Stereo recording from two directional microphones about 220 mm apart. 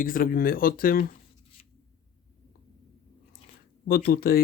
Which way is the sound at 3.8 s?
45° left (ahead or behind).